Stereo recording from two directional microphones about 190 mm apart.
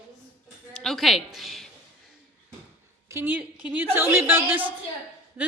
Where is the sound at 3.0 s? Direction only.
10° right (ahead or behind).